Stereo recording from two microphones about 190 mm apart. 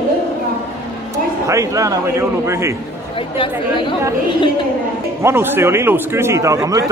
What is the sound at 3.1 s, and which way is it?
Speech, 25° left (ahead or behind).